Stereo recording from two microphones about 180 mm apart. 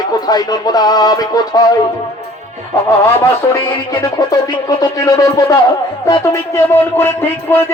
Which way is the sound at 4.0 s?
20° left (ahead or behind).